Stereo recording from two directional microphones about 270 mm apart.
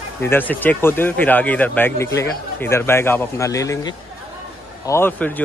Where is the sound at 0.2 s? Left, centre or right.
Centre.